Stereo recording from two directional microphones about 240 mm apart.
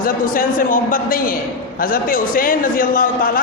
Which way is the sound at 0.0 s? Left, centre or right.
Left.